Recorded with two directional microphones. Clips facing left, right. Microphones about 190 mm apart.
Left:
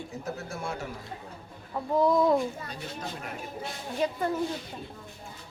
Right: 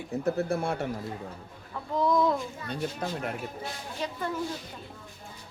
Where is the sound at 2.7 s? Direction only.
60° right (ahead or behind).